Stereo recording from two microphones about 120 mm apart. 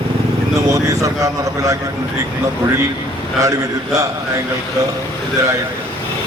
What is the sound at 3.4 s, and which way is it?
A man's voice, 25° right (ahead or behind).